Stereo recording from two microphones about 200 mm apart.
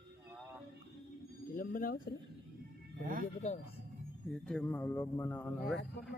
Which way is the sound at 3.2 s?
35° left (ahead or behind).